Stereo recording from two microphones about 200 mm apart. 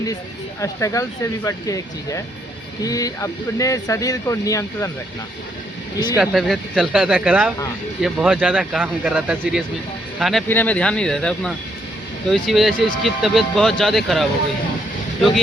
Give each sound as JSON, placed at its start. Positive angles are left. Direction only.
{"t": 0.6, "sound": "speech", "side_deg": 15}
{"t": 6.1, "sound": "speech", "side_deg": 0}